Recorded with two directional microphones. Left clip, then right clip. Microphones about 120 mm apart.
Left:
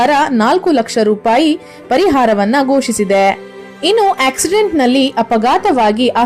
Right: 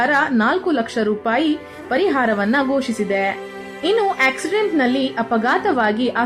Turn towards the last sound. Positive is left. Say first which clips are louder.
# left 7 dB
turn(degrees=40)  # may be behind; listen again after turning